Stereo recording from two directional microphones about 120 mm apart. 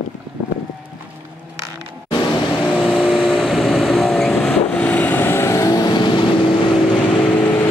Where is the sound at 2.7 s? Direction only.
10° left (ahead or behind).